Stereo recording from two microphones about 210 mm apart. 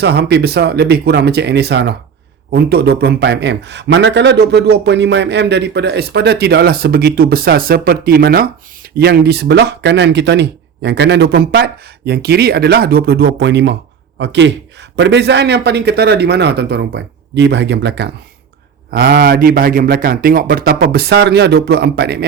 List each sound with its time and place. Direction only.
0.0 s a man's voice: 50° right (ahead or behind)